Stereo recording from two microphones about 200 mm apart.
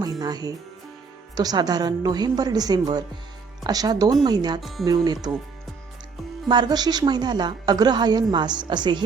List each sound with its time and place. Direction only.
0.0 s a woman's voice: 20° right (ahead or behind)
4.6 s speech: centre (ahead or behind)
4.9 s a woman's voice: 20° right (ahead or behind)
6.5 s a woman's voice: 20° right (ahead or behind)